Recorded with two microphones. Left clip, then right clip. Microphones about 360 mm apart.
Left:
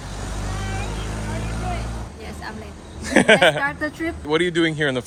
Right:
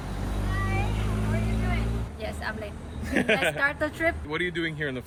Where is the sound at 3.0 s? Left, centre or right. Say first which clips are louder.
Left 10 dB; centre.